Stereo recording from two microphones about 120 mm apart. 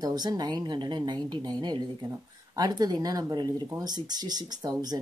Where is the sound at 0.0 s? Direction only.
35° right (ahead or behind).